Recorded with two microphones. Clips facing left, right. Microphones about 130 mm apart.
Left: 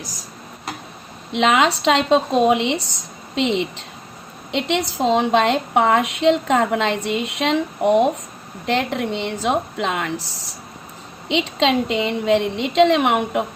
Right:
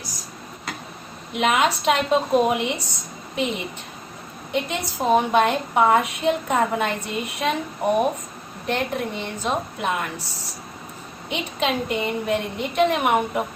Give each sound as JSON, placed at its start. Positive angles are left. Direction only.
{"t": 1.3, "sound": "a woman's voice", "side_deg": 90}
{"t": 4.9, "sound": "a woman's voice", "side_deg": 90}
{"t": 8.6, "sound": "a woman's voice", "side_deg": 90}